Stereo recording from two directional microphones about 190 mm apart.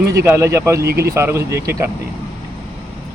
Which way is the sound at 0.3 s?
15° right (ahead or behind).